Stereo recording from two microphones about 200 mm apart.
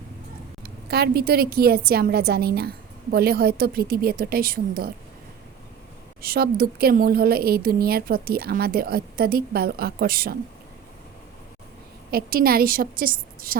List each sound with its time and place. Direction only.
0.6 s a woman's voice: 55° right (ahead or behind)
6.2 s a woman's voice: 50° right (ahead or behind)
12.1 s a woman's voice: 50° right (ahead or behind)